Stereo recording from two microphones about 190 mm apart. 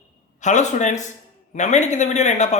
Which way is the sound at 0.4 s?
40° left (ahead or behind).